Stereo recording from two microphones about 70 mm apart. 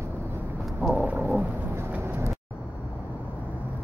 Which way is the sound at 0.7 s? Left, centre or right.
Centre.